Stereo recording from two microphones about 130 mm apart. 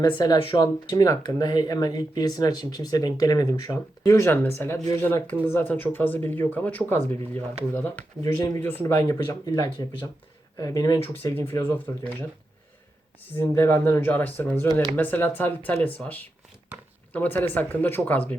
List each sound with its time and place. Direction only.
0.0 s speech: 35° left (ahead or behind)
4.1 s speech: 20° left (ahead or behind)
9.1 s speech: 30° left (ahead or behind)
11.2 s speech: 15° left (ahead or behind)
13.4 s speech: 20° left (ahead or behind)